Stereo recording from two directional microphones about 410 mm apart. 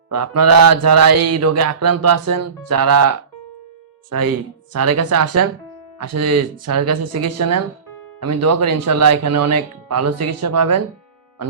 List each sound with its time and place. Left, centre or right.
0.1 s mantra: right
4.1 s mantra: right